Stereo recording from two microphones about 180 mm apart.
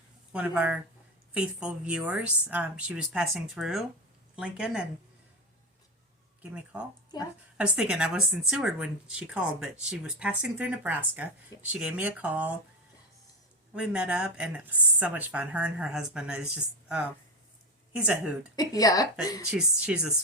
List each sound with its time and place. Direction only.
0.3 s speech: 10° right (ahead or behind)
6.4 s speech: 5° right (ahead or behind)
13.7 s speech: 5° right (ahead or behind)
17.9 s speech: 5° right (ahead or behind)
18.5 s speech: 20° left (ahead or behind)
19.5 s speech: 5° right (ahead or behind)